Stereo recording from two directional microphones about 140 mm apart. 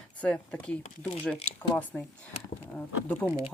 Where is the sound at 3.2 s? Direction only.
5° left (ahead or behind).